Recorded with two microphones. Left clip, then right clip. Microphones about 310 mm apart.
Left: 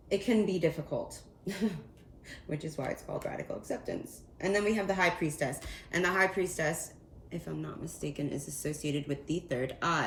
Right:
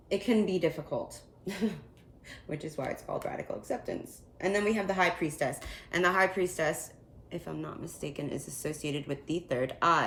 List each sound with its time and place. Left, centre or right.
0.1 s speech: centre